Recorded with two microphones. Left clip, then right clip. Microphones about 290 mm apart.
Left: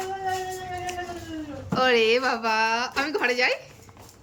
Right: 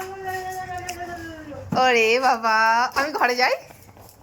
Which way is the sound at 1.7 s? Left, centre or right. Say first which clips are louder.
Right 3 dB; centre.